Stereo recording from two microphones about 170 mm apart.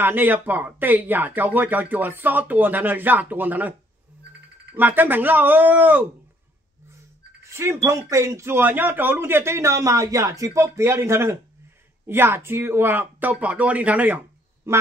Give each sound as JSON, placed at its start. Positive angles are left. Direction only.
{"t": 0.0, "sound": "speech", "side_deg": -10}
{"t": 4.7, "sound": "speech", "side_deg": -10}
{"t": 7.4, "sound": "speech", "side_deg": -15}